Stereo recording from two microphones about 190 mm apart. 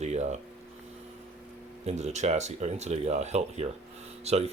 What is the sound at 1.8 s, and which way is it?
Speech, 35° right (ahead or behind).